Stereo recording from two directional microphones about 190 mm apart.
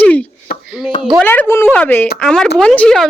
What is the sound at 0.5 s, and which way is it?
Chopping, 50° left (ahead or behind).